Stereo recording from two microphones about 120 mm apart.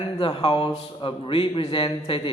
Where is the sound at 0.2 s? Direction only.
45° left (ahead or behind).